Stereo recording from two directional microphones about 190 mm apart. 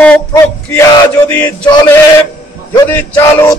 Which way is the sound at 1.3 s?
10° left (ahead or behind).